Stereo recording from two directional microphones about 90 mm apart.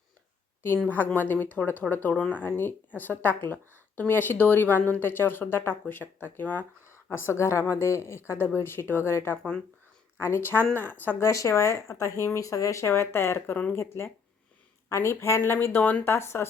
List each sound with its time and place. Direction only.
0.9 s a woman's voice: 20° left (ahead or behind)
6.9 s a woman's voice: 30° left (ahead or behind)
11.3 s a woman's voice: 35° left (ahead or behind)